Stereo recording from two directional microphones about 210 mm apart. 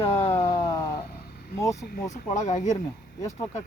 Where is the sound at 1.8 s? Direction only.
40° left (ahead or behind).